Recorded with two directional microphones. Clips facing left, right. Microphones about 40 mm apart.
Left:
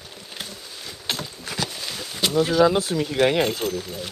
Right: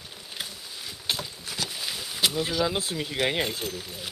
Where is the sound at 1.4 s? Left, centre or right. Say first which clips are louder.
Left 5 dB; left.